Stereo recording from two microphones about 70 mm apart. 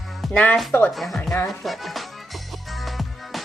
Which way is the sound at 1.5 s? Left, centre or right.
Centre.